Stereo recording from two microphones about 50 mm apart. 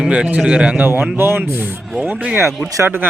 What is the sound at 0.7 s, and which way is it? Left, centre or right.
Speech, right.